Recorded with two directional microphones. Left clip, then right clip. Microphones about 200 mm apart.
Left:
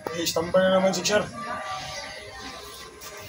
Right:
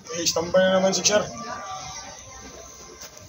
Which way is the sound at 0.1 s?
Centre (ahead or behind).